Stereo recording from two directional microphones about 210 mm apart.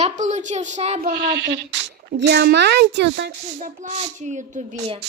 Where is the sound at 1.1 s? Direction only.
55° right (ahead or behind).